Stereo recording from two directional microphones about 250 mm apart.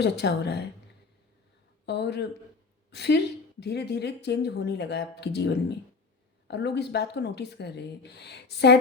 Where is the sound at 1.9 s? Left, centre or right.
Left.